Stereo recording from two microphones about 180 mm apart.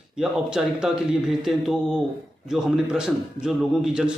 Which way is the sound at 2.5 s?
5° right (ahead or behind).